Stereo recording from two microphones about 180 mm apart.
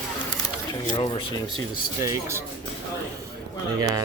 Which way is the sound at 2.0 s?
15° right (ahead or behind).